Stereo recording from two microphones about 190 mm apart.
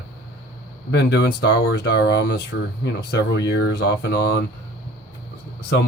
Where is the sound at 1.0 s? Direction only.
65° left (ahead or behind).